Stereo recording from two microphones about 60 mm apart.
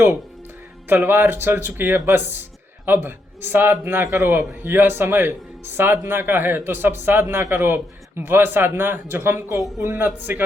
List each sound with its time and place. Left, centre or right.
0.9 s a man's voice: right
9.6 s a woman's voice: centre
9.8 s speech: right
10.2 s speech: right